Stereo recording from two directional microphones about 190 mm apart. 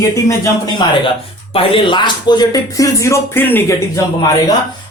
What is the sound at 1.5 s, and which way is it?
Speech, 30° left (ahead or behind).